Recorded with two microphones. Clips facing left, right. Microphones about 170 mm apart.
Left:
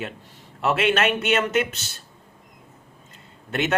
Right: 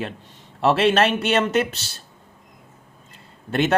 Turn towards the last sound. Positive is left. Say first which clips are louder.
# right 4 dB
turn(degrees=-35)  # may be behind; listen again after turning